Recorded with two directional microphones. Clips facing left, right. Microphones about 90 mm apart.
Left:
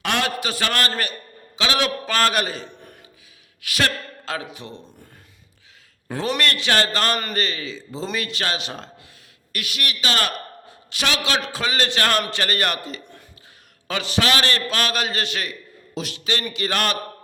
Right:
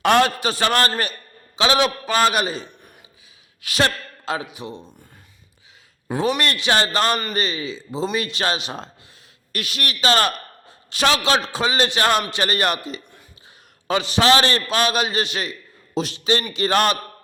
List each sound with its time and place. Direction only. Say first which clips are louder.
0.0 s a man's voice: right 7 dB; 40° right (ahead or behind); by 2.6 s 20° right (ahead or behind)
3.6 s a man's voice: right 2 dB; 30° right (ahead or behind); by 4.8 s 15° right (ahead or behind)
6.1 s a man's voice: right 2 dB; 15° right (ahead or behind)
9.5 s a man's voice: right 2 dB; 35° right (ahead or behind)